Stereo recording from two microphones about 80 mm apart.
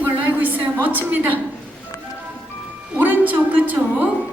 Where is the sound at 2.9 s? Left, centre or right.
Right.